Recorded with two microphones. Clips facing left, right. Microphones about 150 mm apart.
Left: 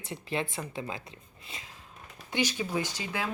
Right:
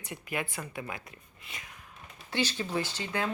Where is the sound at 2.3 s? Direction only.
15° left (ahead or behind).